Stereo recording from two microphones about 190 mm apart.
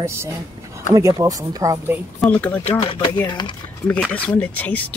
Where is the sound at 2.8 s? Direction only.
30° left (ahead or behind).